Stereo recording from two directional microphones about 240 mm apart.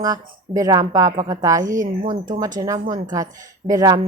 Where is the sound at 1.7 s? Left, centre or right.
Right.